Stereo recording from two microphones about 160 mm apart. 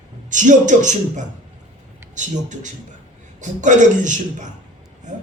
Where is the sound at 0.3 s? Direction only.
50° right (ahead or behind).